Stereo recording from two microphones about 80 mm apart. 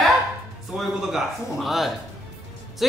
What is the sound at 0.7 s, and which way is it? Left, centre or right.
Speech, centre.